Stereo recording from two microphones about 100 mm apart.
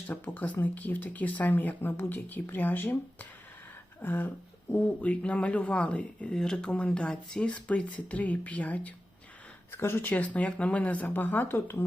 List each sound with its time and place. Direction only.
0.1 s speech: 15° left (ahead or behind)